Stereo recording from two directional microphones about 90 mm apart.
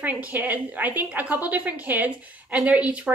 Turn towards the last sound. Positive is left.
turn(degrees=-15)  # may be behind; listen again after turning